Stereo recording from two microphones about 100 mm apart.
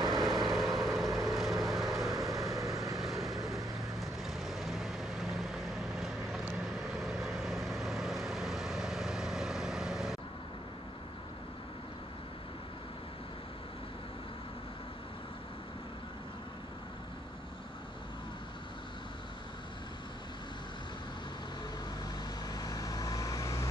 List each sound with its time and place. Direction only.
0.2 s vehicle: centre (ahead or behind)
22.5 s vehicle: 40° left (ahead or behind)